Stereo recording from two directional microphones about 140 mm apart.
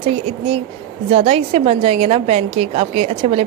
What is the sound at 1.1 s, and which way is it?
A woman's voice, 45° right (ahead or behind).